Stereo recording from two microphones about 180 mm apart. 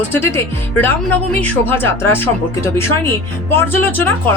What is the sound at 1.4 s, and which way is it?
Speech, 10° left (ahead or behind).